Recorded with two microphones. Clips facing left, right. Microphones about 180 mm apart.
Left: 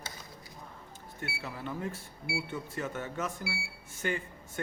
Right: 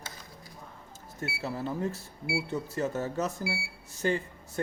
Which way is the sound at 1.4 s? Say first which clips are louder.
Right 6 dB; 40° right (ahead or behind).